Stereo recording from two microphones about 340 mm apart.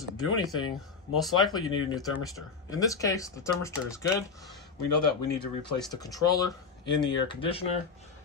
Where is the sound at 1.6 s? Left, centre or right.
Centre.